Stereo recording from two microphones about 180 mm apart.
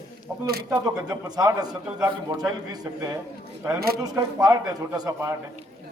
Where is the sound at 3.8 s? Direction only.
60° right (ahead or behind).